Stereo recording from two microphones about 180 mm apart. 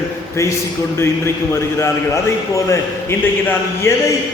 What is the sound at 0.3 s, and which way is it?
A man's voice, 15° left (ahead or behind).